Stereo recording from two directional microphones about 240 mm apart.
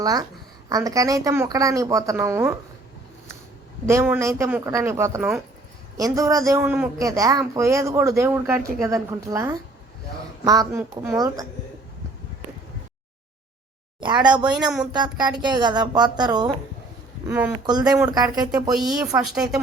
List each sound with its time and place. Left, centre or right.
0.0 s a man's voice: centre
3.8 s a man's voice: centre
14.9 s a man's voice: centre
17.2 s a man's voice: centre
19.2 s speech: centre